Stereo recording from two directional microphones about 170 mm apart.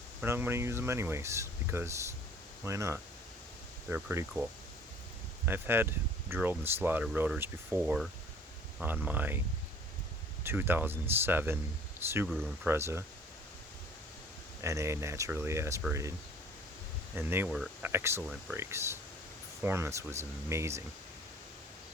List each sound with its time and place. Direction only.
0.2 s speech: 15° right (ahead or behind)
5.5 s speech: 10° right (ahead or behind)
10.4 s speech: 15° right (ahead or behind)
14.6 s speech: 15° right (ahead or behind)
17.2 s speech: 15° right (ahead or behind)